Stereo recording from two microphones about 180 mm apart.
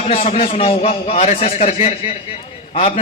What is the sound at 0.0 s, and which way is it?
A man's voice, 35° left (ahead or behind).